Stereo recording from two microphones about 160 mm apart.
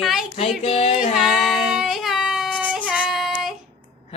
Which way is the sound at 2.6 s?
5° right (ahead or behind).